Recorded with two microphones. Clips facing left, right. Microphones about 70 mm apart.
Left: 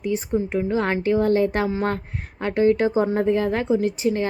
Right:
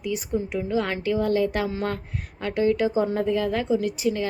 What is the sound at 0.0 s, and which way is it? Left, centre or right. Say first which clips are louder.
A woman's voice: left 4 dB; left.